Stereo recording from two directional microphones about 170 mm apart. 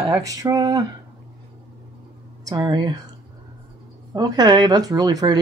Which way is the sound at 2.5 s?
25° right (ahead or behind).